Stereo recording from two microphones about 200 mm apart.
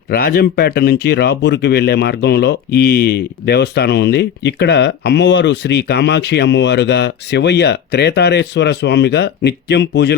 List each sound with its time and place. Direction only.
0.1 s speech: 50° left (ahead or behind)